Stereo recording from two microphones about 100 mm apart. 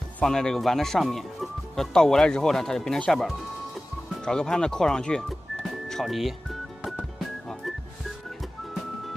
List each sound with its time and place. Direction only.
0.2 s speech: 5° left (ahead or behind)
5.6 s music: centre (ahead or behind)